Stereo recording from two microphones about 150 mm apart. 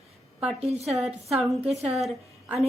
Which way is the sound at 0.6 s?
45° right (ahead or behind).